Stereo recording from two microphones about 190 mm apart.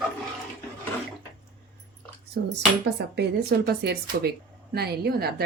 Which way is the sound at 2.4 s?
65° right (ahead or behind).